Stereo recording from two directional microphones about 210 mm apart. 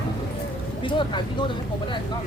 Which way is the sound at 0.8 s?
20° left (ahead or behind).